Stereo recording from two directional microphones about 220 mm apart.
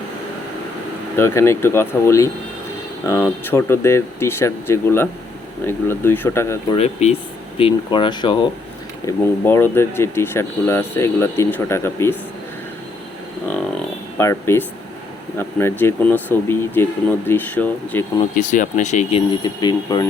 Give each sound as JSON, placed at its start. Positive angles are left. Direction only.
{"t": 1.1, "sound": "speech", "side_deg": 10}
{"t": 6.7, "sound": "speech", "side_deg": 30}
{"t": 9.0, "sound": "speech", "side_deg": 10}
{"t": 14.2, "sound": "speech", "side_deg": 10}
{"t": 18.3, "sound": "speech", "side_deg": 35}
{"t": 19.4, "sound": "speech", "side_deg": 20}